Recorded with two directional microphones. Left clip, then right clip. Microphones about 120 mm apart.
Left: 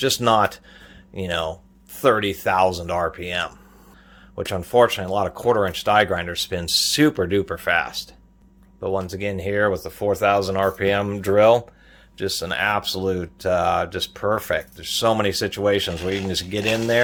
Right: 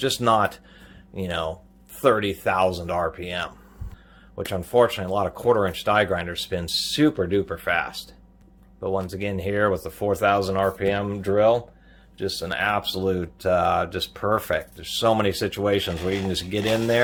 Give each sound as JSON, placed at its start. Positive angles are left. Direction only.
{"t": 0.0, "sound": "speech", "side_deg": 40}
{"t": 10.8, "sound": "speech", "side_deg": 45}
{"t": 12.1, "sound": "speech", "side_deg": 50}
{"t": 12.5, "sound": "speech", "side_deg": 30}
{"t": 16.6, "sound": "speech", "side_deg": 5}